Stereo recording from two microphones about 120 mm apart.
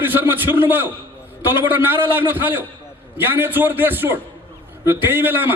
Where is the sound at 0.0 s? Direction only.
15° right (ahead or behind).